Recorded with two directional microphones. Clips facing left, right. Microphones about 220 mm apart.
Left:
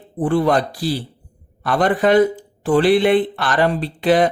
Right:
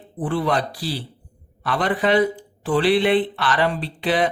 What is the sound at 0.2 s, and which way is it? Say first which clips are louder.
Speech: left 5 dB; 45° left (ahead or behind).